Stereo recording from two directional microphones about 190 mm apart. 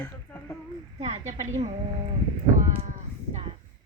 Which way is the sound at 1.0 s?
40° right (ahead or behind).